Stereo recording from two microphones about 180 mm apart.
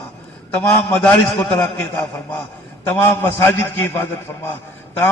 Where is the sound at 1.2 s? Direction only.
20° left (ahead or behind).